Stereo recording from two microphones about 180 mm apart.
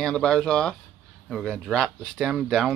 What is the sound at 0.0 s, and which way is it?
Speech, 5° left (ahead or behind).